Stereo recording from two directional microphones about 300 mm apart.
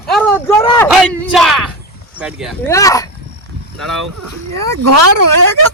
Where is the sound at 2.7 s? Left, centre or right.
Centre.